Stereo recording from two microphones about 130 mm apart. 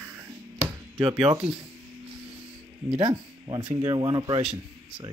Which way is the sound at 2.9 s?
40° right (ahead or behind).